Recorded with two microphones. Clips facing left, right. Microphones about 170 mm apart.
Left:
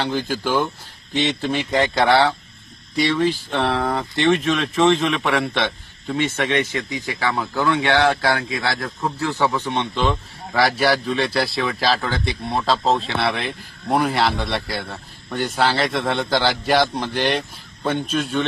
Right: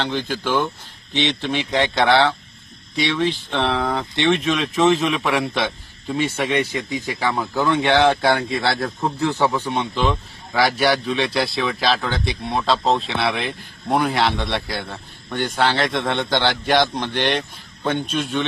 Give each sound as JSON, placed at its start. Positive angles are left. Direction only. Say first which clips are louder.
{"t": 0.0, "sound": "a man's voice", "louder": "left 1 dB", "side_deg": 5}